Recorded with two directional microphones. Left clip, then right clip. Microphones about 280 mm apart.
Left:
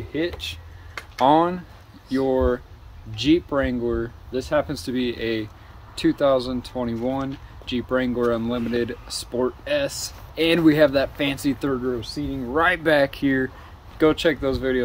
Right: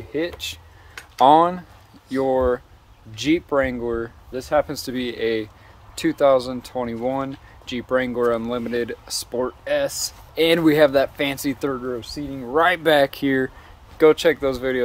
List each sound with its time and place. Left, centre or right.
0.1 s speech: centre